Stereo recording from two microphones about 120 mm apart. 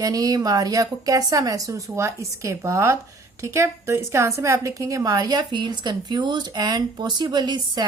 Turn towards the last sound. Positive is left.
turn(degrees=-35)  # may be behind; listen again after turning